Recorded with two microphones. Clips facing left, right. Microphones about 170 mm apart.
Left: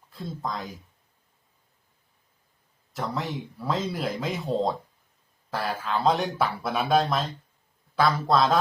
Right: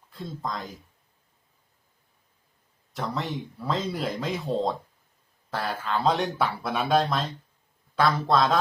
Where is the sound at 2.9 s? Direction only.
Centre (ahead or behind).